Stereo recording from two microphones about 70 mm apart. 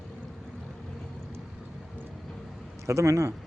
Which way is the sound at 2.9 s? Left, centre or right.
Right.